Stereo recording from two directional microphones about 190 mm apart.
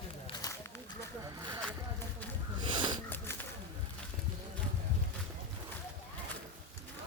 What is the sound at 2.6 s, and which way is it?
Snort, 25° right (ahead or behind).